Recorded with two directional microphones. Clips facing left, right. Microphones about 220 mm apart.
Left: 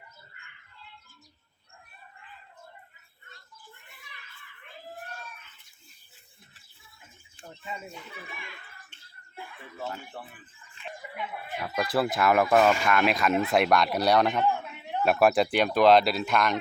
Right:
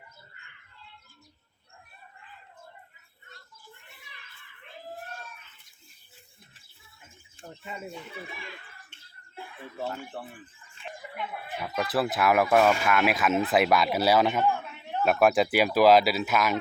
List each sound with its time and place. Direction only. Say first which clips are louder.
11.1 s speech: even; centre (ahead or behind)
14.7 s a sound: even; 15° left (ahead or behind)
15.0 s speech: even; centre (ahead or behind)